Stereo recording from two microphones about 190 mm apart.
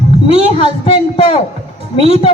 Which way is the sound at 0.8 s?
30° left (ahead or behind).